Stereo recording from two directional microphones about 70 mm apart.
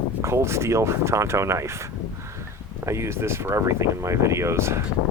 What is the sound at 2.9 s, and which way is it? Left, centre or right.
Speech, right.